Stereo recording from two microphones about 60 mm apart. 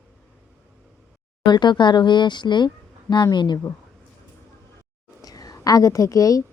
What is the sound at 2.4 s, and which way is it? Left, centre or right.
Speech, left.